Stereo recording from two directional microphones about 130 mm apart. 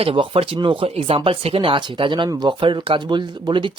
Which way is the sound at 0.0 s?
45° right (ahead or behind).